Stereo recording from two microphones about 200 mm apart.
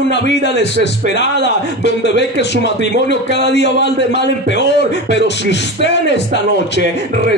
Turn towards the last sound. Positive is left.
turn(degrees=60)  # may be behind; listen again after turning